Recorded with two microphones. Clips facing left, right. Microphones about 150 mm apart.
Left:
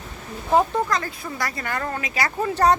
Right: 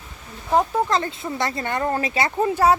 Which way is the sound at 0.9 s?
25° right (ahead or behind).